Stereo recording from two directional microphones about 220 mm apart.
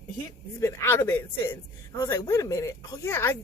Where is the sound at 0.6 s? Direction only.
10° left (ahead or behind).